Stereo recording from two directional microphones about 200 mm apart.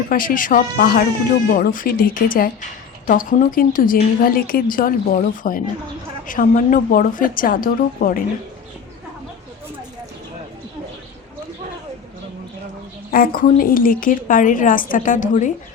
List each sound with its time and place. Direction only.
0.1 s a woman's voice: 45° left (ahead or behind)
13.1 s a woman's voice: 45° left (ahead or behind)